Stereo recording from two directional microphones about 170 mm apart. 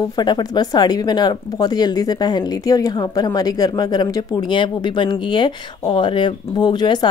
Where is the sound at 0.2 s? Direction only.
25° left (ahead or behind).